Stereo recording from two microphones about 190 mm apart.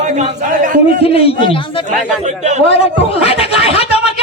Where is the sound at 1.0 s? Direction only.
30° left (ahead or behind).